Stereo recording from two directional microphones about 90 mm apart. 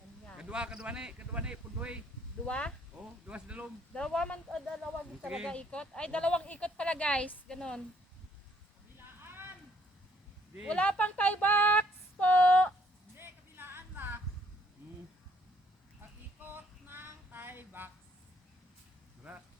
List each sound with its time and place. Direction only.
0.3 s speech: 10° right (ahead or behind)
2.5 s a woman's voice: 10° left (ahead or behind)
3.2 s speech: 15° right (ahead or behind)
3.9 s a woman's voice: 10° left (ahead or behind)
5.2 s speech: 10° right (ahead or behind)
5.5 s a woman's voice: 10° left (ahead or behind)
9.0 s a sound: 25° right (ahead or behind)
10.7 s speech: 10° left (ahead or behind)
13.1 s a sound: 25° right (ahead or behind)
16.5 s female singing: 25° right (ahead or behind)